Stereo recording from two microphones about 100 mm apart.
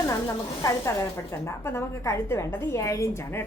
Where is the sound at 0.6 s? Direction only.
30° left (ahead or behind).